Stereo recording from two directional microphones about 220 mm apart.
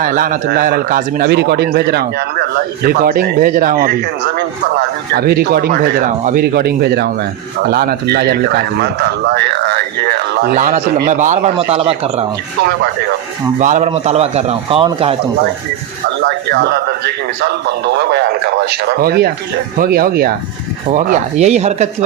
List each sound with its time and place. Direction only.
0.0 s a man's voice: 40° right (ahead or behind)
5.1 s a man's voice: 45° right (ahead or behind); by 12.2 s 25° right (ahead or behind)
13.6 s a man's voice: 35° right (ahead or behind)
16.5 s speech: 45° right (ahead or behind)
17.8 s speech: 50° right (ahead or behind)
20.9 s a man's voice: 30° right (ahead or behind)